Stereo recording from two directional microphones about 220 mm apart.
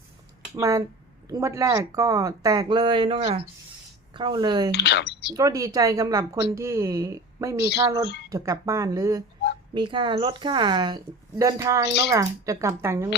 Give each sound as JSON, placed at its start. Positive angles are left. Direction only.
{"t": 0.5, "sound": "speech", "side_deg": -15}
{"t": 4.7, "sound": "speech", "side_deg": 50}
{"t": 5.3, "sound": "speech", "side_deg": -15}